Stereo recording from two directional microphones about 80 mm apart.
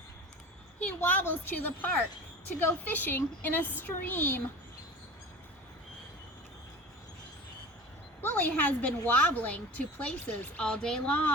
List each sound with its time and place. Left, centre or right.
0.8 s a woman's voice: left
8.2 s a woman's voice: left